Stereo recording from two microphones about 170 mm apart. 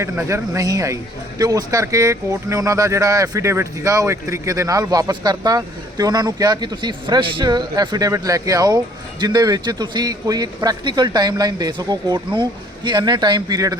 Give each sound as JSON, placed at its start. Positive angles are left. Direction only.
{"t": 0.0, "sound": "speech", "side_deg": -15}